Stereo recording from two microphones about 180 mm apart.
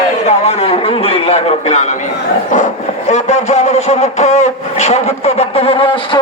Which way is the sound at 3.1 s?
40° left (ahead or behind).